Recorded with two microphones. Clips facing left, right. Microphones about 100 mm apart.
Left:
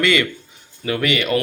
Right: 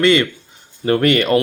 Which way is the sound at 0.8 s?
45° right (ahead or behind).